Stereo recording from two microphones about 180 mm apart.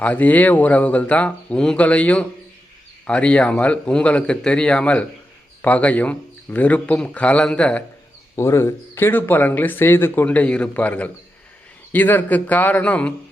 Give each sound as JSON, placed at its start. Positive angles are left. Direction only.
{"t": 0.0, "sound": "speech", "side_deg": 10}